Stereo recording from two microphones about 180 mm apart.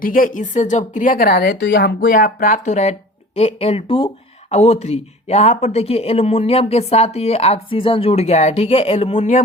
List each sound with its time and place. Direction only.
0.0 s a woman's voice: 50° left (ahead or behind); by 2.0 s 70° left (ahead or behind)
2.0 s a woman's voice: 50° left (ahead or behind)